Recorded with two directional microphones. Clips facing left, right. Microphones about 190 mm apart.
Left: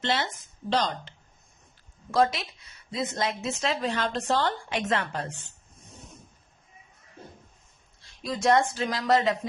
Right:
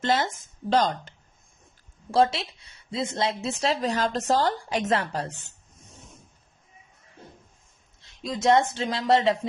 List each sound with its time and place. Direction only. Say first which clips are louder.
0.0 s a woman's voice: right 4 dB; 45° right (ahead or behind)
2.0 s a woman's voice: right 2 dB; 30° right (ahead or behind)
8.0 s speech: right 2 dB; 20° right (ahead or behind)